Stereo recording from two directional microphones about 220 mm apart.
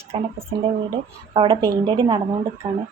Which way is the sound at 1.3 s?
25° right (ahead or behind).